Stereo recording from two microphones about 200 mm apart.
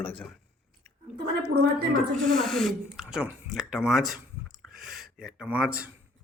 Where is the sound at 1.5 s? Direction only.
50° right (ahead or behind).